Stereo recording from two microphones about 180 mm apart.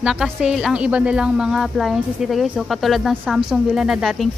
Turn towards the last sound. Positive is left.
turn(degrees=0)  # may be behind; listen again after turning